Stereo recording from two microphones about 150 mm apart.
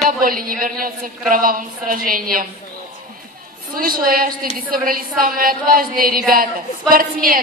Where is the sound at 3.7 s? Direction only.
75° right (ahead or behind).